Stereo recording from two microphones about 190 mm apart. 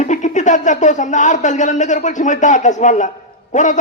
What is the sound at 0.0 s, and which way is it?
A man's voice, 40° left (ahead or behind).